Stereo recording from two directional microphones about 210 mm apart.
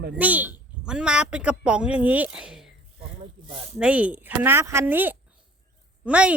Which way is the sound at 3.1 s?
30° right (ahead or behind).